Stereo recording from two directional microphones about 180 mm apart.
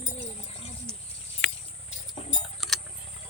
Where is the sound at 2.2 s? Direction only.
35° left (ahead or behind).